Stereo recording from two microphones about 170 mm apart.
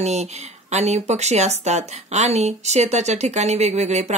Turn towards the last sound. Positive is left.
turn(degrees=-40)  # may be behind; listen again after turning